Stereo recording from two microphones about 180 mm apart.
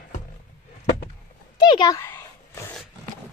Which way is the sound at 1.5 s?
25° left (ahead or behind).